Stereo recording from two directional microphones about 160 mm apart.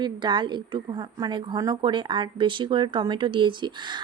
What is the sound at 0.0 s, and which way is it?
A woman's voice, 30° right (ahead or behind).